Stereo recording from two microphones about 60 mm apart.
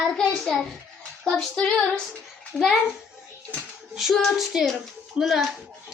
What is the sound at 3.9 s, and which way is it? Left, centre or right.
Child singing, centre.